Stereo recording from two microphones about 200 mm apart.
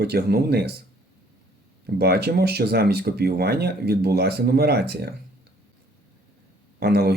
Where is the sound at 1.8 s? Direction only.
50° right (ahead or behind).